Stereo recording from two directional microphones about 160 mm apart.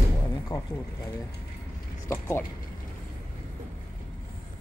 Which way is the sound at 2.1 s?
15° left (ahead or behind).